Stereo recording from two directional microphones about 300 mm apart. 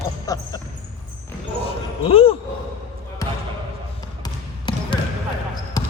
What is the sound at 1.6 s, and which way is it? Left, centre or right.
Basketball bounce, centre.